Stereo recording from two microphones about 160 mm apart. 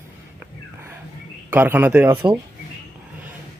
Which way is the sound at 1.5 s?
10° right (ahead or behind).